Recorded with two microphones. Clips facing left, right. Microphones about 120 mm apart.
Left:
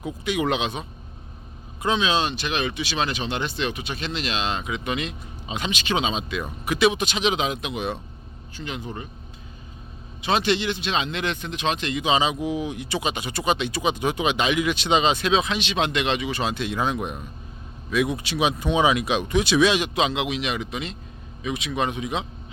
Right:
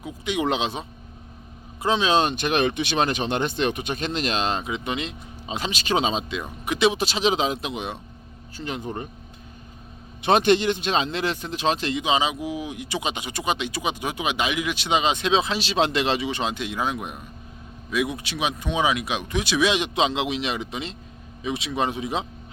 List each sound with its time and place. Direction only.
0.3 s a man's voice: 25° right (ahead or behind); by 4.6 s 40° right (ahead or behind)
4.6 s speech: 30° right (ahead or behind)
6.3 s speech: 20° right (ahead or behind)
8.5 s speech: 40° right (ahead or behind)
10.2 s speech: 50° right (ahead or behind); by 12.0 s 35° right (ahead or behind)
12.0 s speech: 15° right (ahead or behind)
19.6 s a man's voice: 20° right (ahead or behind)